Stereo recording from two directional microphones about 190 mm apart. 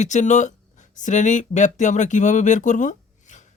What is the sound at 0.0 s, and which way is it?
Speech, 40° left (ahead or behind).